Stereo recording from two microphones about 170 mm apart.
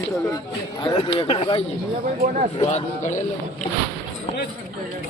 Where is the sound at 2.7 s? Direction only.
45° left (ahead or behind).